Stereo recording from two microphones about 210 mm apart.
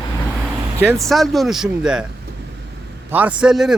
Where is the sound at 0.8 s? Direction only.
10° right (ahead or behind).